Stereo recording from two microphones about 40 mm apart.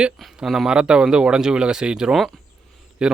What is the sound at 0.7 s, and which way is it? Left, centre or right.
Speech, right.